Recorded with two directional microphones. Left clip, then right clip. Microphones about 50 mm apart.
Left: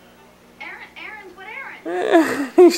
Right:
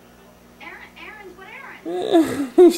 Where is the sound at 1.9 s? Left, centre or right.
Left.